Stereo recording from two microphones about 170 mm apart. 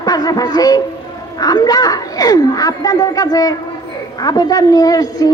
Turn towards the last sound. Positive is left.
turn(degrees=20)  # may be behind; listen again after turning